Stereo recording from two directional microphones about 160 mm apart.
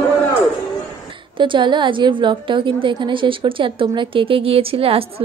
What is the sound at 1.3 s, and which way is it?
A woman's voice, 30° right (ahead or behind).